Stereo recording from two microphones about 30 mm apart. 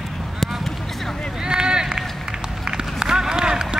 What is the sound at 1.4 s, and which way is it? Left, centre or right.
Run, right.